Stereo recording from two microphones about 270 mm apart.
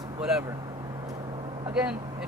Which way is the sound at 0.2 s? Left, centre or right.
Centre.